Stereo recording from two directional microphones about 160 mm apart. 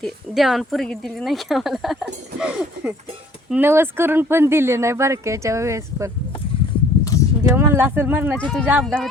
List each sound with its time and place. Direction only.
0.0 s speech: centre (ahead or behind); by 6.1 s 20° right (ahead or behind)
7.0 s a sound: 20° left (ahead or behind)
7.5 s speech: 15° right (ahead or behind)
8.4 s speech: 5° left (ahead or behind)